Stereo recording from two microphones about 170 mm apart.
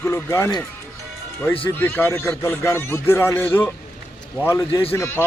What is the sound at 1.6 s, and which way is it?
Speech, 15° left (ahead or behind).